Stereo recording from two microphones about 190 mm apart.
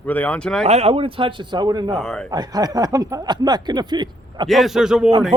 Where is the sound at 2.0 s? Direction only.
5° left (ahead or behind).